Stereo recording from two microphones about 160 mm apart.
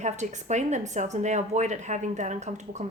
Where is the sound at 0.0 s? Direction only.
45° right (ahead or behind).